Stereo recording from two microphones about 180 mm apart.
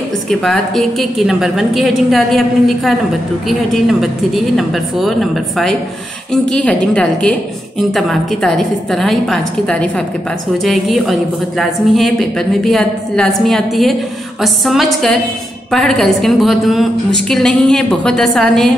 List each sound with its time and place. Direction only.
0.3 s a woman's voice: centre (ahead or behind)